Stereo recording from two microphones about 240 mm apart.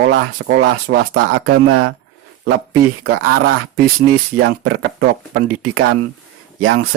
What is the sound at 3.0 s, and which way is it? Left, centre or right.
Speech, right.